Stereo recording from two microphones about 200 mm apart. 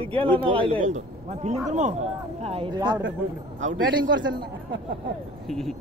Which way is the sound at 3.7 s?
70° right (ahead or behind).